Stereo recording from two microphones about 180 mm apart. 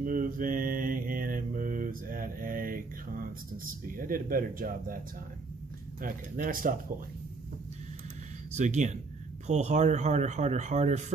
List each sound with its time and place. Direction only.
0.0 s mantra: 50° right (ahead or behind)
3.8 s speech: 50° right (ahead or behind)
6.0 s speech: 50° right (ahead or behind)
8.5 s speech: 40° right (ahead or behind)